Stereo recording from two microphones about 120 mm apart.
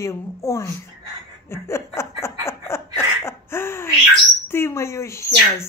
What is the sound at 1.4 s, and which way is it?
Chuckle, 20° left (ahead or behind).